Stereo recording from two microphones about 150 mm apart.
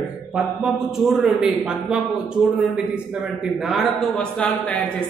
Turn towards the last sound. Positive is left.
turn(degrees=10)  # may be behind; listen again after turning